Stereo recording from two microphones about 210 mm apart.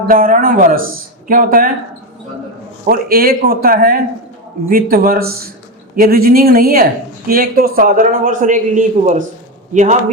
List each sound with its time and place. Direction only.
0.1 s a man's voice: 40° right (ahead or behind)
2.9 s a man's voice: 45° right (ahead or behind)